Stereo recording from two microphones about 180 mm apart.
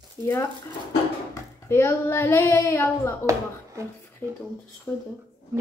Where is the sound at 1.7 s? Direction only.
15° left (ahead or behind).